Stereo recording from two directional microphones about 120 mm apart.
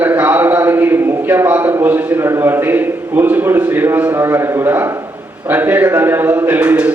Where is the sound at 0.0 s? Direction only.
15° right (ahead or behind).